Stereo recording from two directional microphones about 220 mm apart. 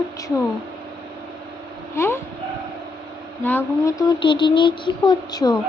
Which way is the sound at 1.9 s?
10° left (ahead or behind).